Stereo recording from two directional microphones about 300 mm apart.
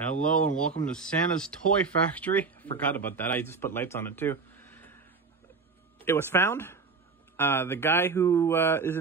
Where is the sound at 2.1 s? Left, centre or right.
Centre.